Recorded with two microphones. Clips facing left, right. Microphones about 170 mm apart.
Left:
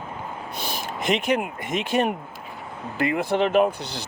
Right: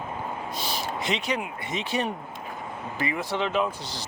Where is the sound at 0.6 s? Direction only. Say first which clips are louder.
Left 3 dB; 50° left (ahead or behind).